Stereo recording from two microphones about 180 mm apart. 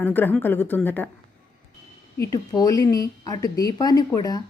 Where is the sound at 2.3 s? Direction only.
20° left (ahead or behind).